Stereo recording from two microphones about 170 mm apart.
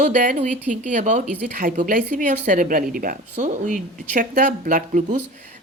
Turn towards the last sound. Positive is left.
turn(degrees=-50)  # may be behind; listen again after turning